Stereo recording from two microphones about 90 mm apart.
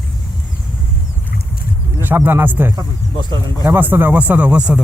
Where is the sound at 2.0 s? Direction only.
20° right (ahead or behind).